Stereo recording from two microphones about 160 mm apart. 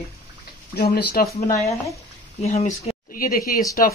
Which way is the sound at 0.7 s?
75° left (ahead or behind).